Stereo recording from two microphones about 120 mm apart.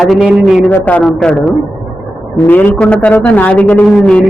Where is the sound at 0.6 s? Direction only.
10° left (ahead or behind).